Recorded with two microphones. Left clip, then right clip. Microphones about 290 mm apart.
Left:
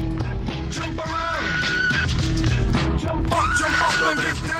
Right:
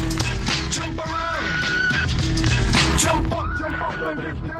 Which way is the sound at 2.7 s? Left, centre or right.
Right.